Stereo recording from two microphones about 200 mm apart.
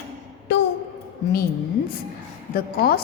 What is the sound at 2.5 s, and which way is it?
Speech, 50° left (ahead or behind).